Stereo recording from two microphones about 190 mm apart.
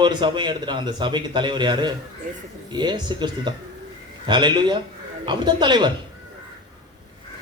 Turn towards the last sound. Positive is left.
turn(degrees=-25)  # may be behind; listen again after turning